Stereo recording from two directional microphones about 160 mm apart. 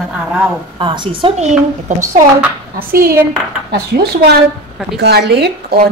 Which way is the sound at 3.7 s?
90° right.